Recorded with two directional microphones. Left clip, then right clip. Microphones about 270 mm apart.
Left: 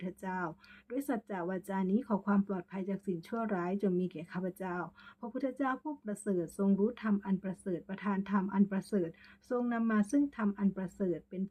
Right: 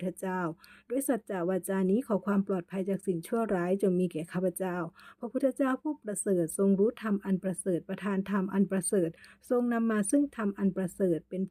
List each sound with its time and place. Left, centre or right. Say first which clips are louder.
0.0 s speech: right 5 dB; right